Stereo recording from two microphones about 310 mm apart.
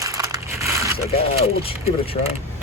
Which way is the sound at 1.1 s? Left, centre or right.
Centre.